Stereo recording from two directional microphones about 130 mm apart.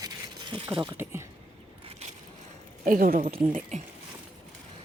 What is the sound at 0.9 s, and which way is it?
Speech, 20° right (ahead or behind).